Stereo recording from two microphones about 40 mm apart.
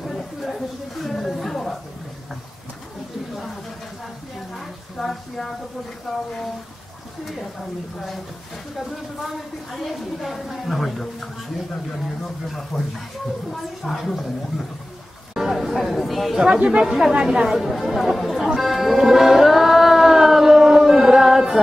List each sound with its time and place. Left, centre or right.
0.0 s a sound: centre
4.6 s a sound: centre
6.0 s a woman's voice: centre
8.7 s a woman's voice: centre
12.4 s a woman's voice: centre
15.5 s a woman's voice: centre
16.3 s speech: right
17.2 s a woman's voice: centre
17.6 s a woman's voice: centre
18.5 s music: centre